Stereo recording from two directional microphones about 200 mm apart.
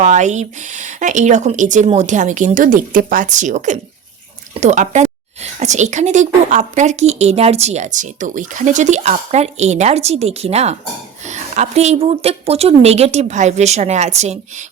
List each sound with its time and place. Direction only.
0.0 s speech: 35° right (ahead or behind)